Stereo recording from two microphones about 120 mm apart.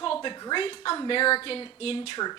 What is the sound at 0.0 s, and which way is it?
Speech, 45° left (ahead or behind).